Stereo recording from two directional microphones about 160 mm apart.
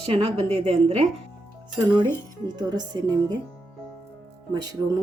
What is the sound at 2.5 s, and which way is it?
Speech, 25° right (ahead or behind).